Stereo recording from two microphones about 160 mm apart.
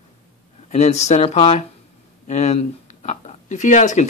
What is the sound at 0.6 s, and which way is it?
Speech, 45° left (ahead or behind).